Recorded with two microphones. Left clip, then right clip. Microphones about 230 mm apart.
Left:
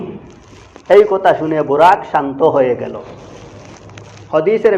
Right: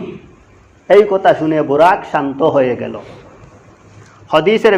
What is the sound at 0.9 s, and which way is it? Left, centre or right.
A man's voice, right.